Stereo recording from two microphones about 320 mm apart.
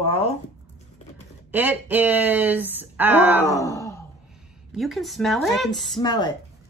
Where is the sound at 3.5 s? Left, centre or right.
Centre.